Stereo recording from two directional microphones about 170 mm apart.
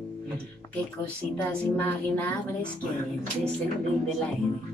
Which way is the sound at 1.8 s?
10° left (ahead or behind).